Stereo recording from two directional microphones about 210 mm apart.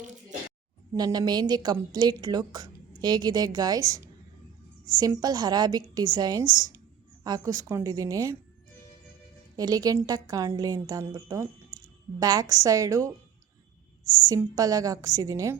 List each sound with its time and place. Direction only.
0.0 s a sound: 35° right (ahead or behind)
0.9 s a woman's voice: 20° right (ahead or behind)
9.6 s a woman's voice: 15° right (ahead or behind)
14.3 s a woman's voice: 15° right (ahead or behind)